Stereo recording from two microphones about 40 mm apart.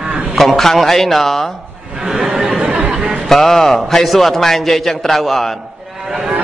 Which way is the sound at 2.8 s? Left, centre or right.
Right.